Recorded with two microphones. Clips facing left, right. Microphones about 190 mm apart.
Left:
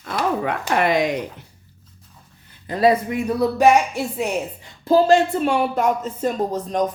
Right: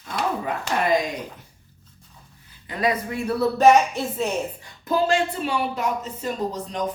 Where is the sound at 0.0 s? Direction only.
75° left (ahead or behind).